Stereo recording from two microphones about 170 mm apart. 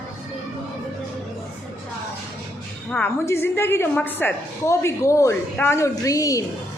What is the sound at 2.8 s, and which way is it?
A woman's voice, 10° left (ahead or behind).